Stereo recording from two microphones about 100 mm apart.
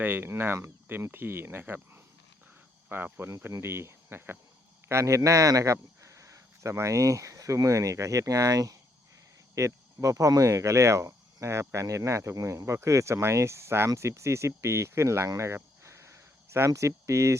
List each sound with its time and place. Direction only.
0.0 s speech: 20° right (ahead or behind)